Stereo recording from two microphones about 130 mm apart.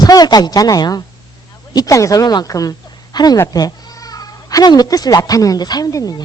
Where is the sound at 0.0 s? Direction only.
30° left (ahead or behind).